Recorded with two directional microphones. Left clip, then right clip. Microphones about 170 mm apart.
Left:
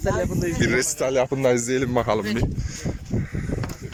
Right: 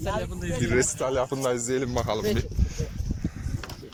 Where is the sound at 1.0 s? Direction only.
15° left (ahead or behind).